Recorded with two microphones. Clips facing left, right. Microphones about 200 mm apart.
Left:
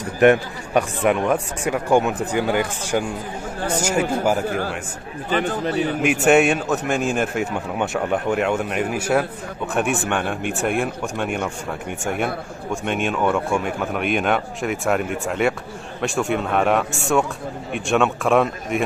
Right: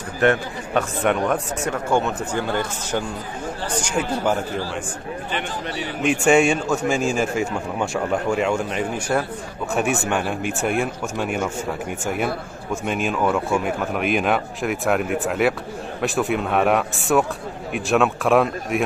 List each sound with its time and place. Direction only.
0.2 s speech: 15° left (ahead or behind)
1.0 s a man's voice: 5° left (ahead or behind)
1.6 s speech: 15° left (ahead or behind)
4.5 s a man's voice: 55° left (ahead or behind)
6.0 s a man's voice: 5° left (ahead or behind)